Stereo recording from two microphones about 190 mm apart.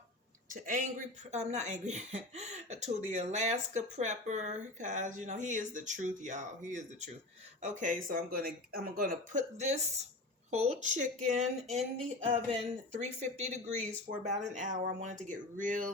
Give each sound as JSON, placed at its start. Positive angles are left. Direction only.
{"t": 0.4, "sound": "speech", "side_deg": -45}